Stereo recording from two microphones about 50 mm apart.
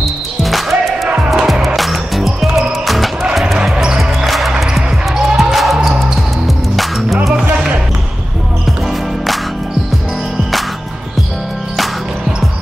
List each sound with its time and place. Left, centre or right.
0.0 s music: centre
1.0 s music: right
1.8 s music: centre
3.7 s basketball bounce: centre
4.3 s music: centre
8.8 s music: centre